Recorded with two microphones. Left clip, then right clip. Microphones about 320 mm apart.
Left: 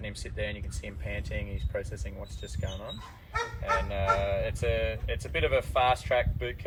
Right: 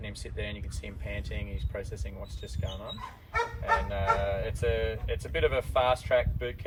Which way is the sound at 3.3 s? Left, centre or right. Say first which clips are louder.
Right 2 dB; centre.